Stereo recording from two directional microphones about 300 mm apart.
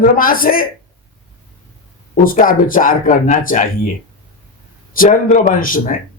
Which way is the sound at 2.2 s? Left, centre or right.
Left.